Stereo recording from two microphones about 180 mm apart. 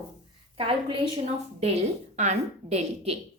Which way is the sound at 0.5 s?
30° right (ahead or behind).